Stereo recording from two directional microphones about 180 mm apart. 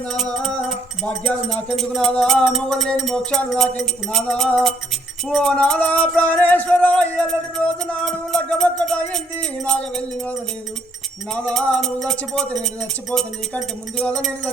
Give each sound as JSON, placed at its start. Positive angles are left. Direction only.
{"t": 0.1, "sound": "music", "side_deg": 5}